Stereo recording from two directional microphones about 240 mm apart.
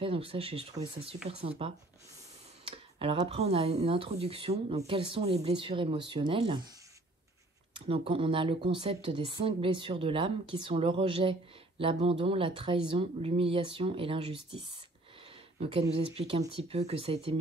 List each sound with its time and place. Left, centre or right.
0.0 s speech: right
2.6 s speech: right
7.7 s speech: right
16.2 s speech: right